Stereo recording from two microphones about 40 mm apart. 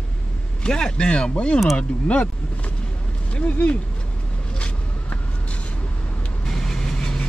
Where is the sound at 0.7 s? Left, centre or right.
Left.